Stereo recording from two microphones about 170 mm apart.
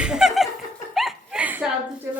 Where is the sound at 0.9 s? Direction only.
5° right (ahead or behind).